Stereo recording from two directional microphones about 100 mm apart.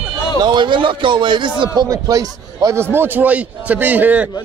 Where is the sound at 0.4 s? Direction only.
50° right (ahead or behind).